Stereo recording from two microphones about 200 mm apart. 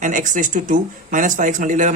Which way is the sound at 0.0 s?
40° right (ahead or behind).